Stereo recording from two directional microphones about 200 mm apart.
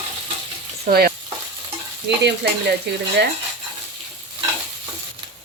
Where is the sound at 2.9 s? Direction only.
60° right (ahead or behind).